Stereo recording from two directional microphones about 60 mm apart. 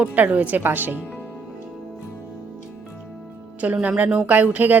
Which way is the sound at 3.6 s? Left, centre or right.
Right.